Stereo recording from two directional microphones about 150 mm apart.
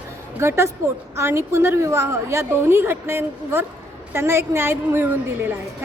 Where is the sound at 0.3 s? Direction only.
15° right (ahead or behind).